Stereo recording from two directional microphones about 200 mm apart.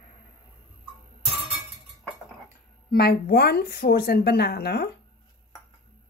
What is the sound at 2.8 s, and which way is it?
Speech, 50° left (ahead or behind).